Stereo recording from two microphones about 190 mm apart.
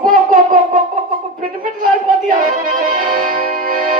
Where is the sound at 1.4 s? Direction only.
50° right (ahead or behind).